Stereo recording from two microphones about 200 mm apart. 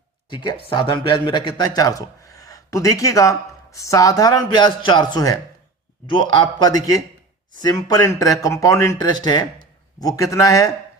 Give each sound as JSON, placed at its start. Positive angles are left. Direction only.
{"t": 0.3, "sound": "a man's voice", "side_deg": 25}